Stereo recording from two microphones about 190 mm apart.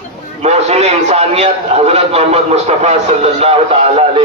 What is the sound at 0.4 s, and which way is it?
A man's voice, 35° right (ahead or behind).